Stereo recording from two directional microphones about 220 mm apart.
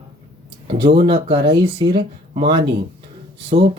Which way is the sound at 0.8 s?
20° right (ahead or behind).